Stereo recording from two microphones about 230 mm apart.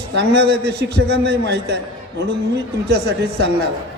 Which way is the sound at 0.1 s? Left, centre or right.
Right.